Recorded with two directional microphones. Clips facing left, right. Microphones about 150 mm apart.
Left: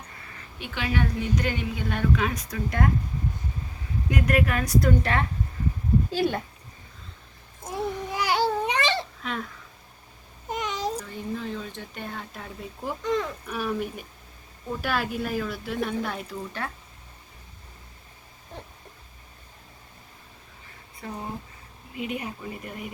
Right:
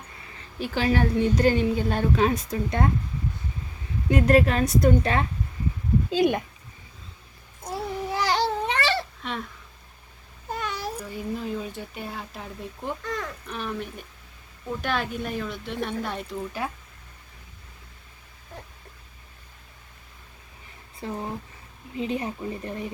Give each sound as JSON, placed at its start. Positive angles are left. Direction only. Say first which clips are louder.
{"t": 0.6, "sound": "a woman's voice", "louder": "right 5 dB", "side_deg": -35}
{"t": 4.1, "sound": "a woman's voice", "louder": "right 5 dB", "side_deg": -30}
{"t": 8.1, "sound": "babbling", "louder": "even", "side_deg": 10}
{"t": 9.2, "sound": "speech", "louder": "even", "side_deg": 0}
{"t": 10.5, "sound": "cat", "louder": "left 2 dB", "side_deg": 20}
{"t": 11.1, "sound": "speech", "louder": "right 2 dB", "side_deg": -5}
{"t": 16.5, "sound": "speech", "louder": "right 3 dB", "side_deg": -10}
{"t": 21.0, "sound": "a woman's voice", "louder": "right 3 dB", "side_deg": -30}